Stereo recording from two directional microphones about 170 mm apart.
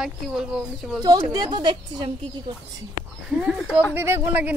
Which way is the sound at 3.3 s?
Centre (ahead or behind).